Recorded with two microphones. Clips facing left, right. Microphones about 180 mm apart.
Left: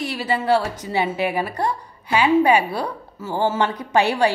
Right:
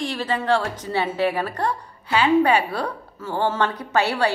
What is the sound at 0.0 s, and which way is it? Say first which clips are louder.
A woman's voice: left 1 dB; 10° left (ahead or behind).